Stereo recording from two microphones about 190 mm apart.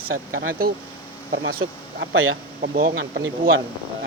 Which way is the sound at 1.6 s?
90° right.